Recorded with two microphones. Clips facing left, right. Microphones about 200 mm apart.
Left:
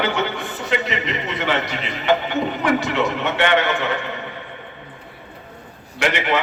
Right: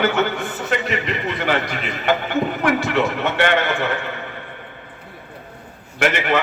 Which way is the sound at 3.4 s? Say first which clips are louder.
Even; 50° right (ahead or behind).